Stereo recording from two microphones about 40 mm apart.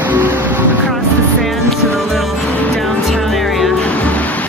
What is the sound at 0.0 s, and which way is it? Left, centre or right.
Music, right.